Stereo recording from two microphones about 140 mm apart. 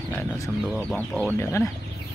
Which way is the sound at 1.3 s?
15° left (ahead or behind).